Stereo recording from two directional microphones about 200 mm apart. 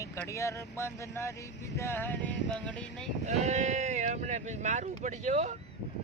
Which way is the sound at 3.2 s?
35° right (ahead or behind).